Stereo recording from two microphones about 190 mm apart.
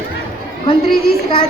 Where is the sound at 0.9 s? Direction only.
55° left (ahead or behind).